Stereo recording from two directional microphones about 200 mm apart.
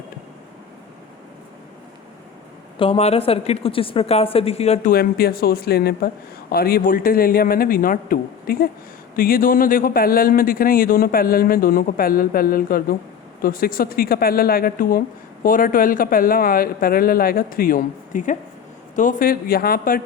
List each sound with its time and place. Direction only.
2.7 s a woman's voice: 25° left (ahead or behind)
4.9 s speech: 50° left (ahead or behind)